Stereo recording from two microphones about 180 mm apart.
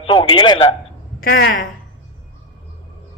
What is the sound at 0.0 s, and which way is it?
Speech, 30° left (ahead or behind).